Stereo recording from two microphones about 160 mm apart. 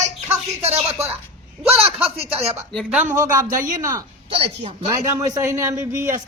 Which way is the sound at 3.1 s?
20° right (ahead or behind).